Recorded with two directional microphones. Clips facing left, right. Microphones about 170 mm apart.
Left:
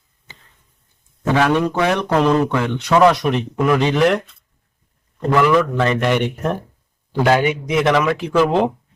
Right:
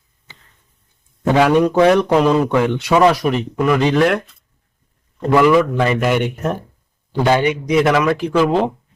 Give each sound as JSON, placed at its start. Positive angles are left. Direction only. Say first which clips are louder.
{"t": 1.3, "sound": "speech", "louder": "right 3 dB", "side_deg": -10}
{"t": 5.4, "sound": "speech", "louder": "right 2 dB", "side_deg": -10}